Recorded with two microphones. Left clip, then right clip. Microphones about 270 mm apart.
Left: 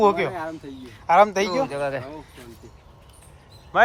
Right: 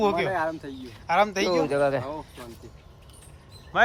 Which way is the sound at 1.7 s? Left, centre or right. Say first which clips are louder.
Right 3 dB; right.